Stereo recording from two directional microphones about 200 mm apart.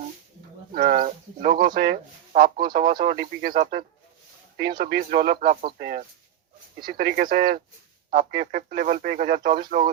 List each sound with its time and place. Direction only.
0.7 s speech: 45° right (ahead or behind)